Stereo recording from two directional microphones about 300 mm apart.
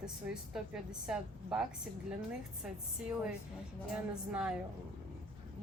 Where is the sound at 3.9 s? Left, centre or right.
Centre.